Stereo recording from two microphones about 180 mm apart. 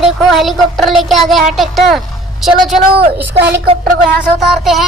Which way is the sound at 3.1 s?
70° right (ahead or behind).